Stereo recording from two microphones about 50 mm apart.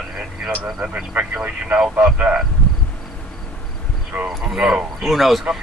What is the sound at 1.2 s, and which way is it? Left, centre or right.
Speech, right.